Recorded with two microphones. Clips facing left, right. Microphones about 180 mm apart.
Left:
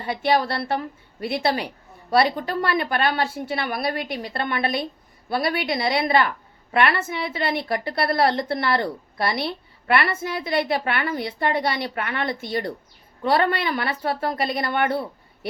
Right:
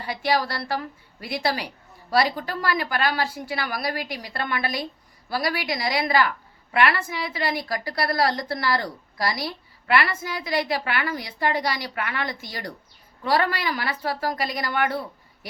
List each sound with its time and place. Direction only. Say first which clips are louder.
0.0 s a woman's voice: left 3 dB; 25° left (ahead or behind)